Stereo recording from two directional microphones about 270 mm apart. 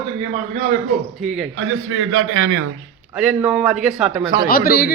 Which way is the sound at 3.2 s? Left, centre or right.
Centre.